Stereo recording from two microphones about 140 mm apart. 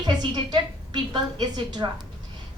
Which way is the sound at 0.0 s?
30° right (ahead or behind).